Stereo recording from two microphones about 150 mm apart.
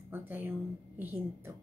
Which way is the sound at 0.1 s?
15° right (ahead or behind).